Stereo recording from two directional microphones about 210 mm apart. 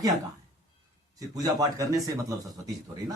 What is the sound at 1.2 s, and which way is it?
A man's voice, 15° right (ahead or behind).